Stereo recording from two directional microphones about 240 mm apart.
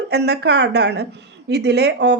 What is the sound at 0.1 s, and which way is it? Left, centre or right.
A woman's voice, right.